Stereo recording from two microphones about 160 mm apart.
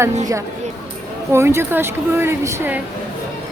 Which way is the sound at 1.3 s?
15° right (ahead or behind).